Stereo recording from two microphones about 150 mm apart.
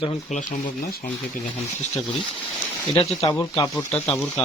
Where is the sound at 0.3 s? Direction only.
55° left (ahead or behind).